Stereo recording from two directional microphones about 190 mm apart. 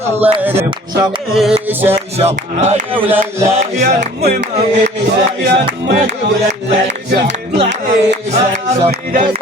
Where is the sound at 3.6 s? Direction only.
40° right (ahead or behind).